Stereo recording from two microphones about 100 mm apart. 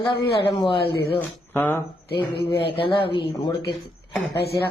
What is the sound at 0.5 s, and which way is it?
Speech, 55° left (ahead or behind).